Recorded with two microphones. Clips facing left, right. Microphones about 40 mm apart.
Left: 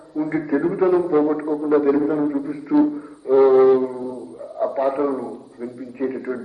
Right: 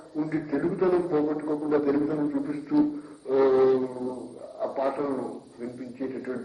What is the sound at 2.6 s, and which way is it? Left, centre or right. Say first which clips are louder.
Speech: left 7 dB; left.